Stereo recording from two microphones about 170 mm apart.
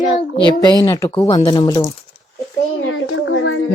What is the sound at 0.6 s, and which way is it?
Speech, 25° left (ahead or behind).